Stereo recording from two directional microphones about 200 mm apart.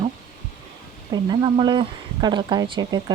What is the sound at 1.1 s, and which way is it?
Speech, 20° right (ahead or behind).